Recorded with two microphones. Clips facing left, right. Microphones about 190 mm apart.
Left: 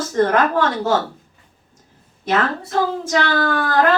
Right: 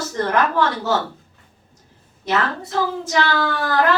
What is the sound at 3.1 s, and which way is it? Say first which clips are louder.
Speech: left 2 dB; 50° left (ahead or behind).